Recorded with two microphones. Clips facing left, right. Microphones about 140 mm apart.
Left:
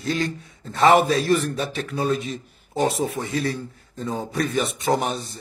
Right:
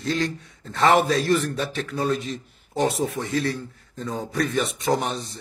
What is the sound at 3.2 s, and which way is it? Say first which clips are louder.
Speech: even; 30° left (ahead or behind).